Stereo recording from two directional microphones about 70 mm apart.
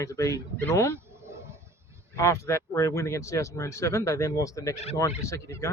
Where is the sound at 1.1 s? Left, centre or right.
Right.